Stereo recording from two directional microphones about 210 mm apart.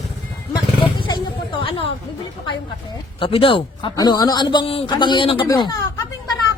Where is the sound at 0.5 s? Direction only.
20° left (ahead or behind).